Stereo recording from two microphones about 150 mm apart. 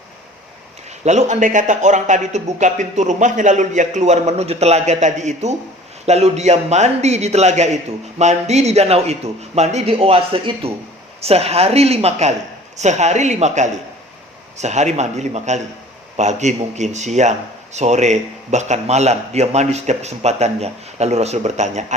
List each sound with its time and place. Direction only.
1.0 s a man's voice: 50° right (ahead or behind)